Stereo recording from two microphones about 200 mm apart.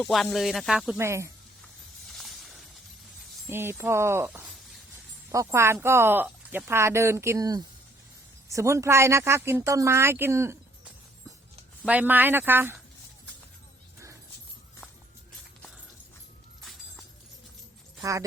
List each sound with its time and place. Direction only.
0.0 s speech: centre (ahead or behind)
0.9 s speech: 15° right (ahead or behind)
2.0 s a sound: centre (ahead or behind)
3.4 s speech: 10° right (ahead or behind)
18.0 s speech: 15° right (ahead or behind)